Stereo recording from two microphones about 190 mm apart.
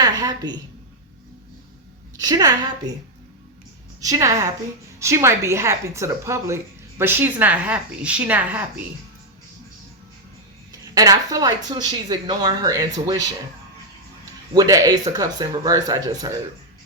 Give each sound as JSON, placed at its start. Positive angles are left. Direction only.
{"t": 0.0, "sound": "a woman's voice", "side_deg": -20}
{"t": 2.1, "sound": "speech", "side_deg": -20}
{"t": 4.0, "sound": "speech", "side_deg": -20}
{"t": 10.9, "sound": "speech", "side_deg": -20}
{"t": 14.5, "sound": "speech", "side_deg": -20}